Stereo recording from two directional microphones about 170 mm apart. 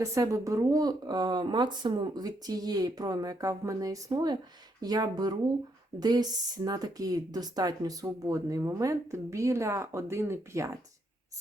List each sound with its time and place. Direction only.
0.0 s speech: 20° right (ahead or behind)